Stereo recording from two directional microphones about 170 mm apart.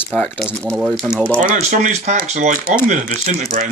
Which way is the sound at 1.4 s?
45° right (ahead or behind).